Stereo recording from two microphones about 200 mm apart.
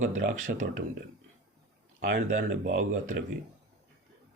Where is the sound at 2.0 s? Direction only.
50° right (ahead or behind).